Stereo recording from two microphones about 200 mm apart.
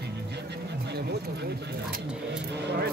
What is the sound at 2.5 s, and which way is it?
Speech, 55° right (ahead or behind).